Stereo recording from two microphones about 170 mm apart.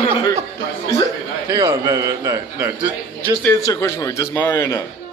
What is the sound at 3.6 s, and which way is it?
A man's voice, 20° left (ahead or behind).